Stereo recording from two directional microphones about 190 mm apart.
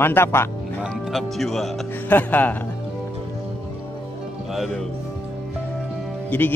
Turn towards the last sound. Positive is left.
turn(degrees=10)  # may be behind; listen again after turning